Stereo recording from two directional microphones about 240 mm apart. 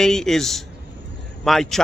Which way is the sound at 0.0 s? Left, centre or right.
Centre.